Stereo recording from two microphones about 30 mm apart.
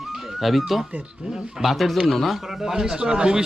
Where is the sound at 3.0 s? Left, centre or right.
Right.